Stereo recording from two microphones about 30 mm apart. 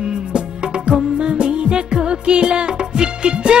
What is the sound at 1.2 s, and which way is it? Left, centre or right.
Music, right.